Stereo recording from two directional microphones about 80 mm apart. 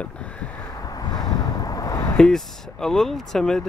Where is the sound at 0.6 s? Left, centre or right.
Left.